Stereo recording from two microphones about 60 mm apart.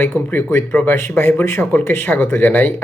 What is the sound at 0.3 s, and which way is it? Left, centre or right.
Speech, left.